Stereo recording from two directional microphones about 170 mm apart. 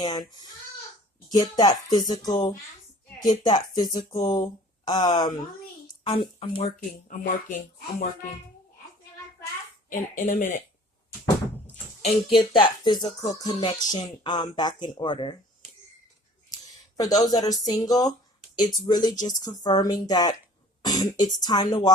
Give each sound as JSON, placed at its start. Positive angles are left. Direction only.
{"t": 0.0, "sound": "speech", "side_deg": 25}
{"t": 6.7, "sound": "speech", "side_deg": 50}
{"t": 9.9, "sound": "speech", "side_deg": 45}
{"t": 12.0, "sound": "speech", "side_deg": 30}
{"t": 17.0, "sound": "speech", "side_deg": 20}